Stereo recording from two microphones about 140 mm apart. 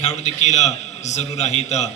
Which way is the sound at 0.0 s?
55° left (ahead or behind).